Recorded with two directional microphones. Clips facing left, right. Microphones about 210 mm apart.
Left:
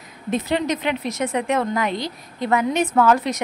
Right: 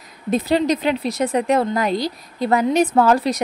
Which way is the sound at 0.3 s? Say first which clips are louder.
Right 4 dB; 35° right (ahead or behind).